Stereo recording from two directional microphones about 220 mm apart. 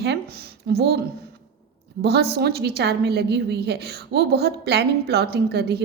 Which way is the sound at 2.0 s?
45° right (ahead or behind).